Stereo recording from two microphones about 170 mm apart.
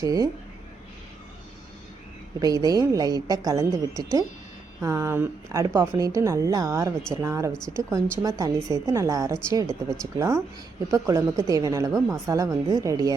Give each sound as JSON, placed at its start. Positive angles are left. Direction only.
{"t": 0.0, "sound": "a woman's voice", "side_deg": -20}
{"t": 2.4, "sound": "a woman's voice", "side_deg": -20}